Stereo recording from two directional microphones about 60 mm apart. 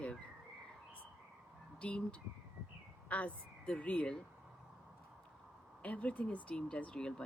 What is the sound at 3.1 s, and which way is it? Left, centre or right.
Speech, left.